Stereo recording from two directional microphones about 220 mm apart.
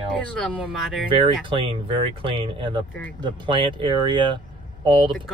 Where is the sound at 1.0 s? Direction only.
20° right (ahead or behind).